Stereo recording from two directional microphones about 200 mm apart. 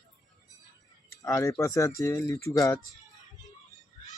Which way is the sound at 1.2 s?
15° left (ahead or behind).